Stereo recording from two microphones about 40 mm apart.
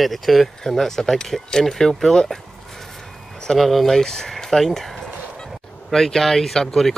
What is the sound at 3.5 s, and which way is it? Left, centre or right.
Speech, centre.